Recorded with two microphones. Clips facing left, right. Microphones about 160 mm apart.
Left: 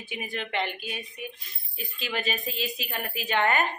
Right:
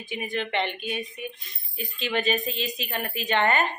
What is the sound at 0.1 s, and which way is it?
A woman's voice, 5° left (ahead or behind).